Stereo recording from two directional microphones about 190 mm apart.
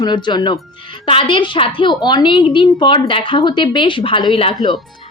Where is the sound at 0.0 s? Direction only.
25° left (ahead or behind).